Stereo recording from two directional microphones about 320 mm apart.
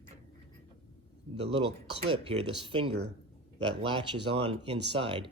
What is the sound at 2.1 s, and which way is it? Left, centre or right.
Speech, centre.